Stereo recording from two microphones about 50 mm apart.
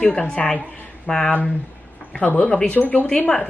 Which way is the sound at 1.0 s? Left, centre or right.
Centre.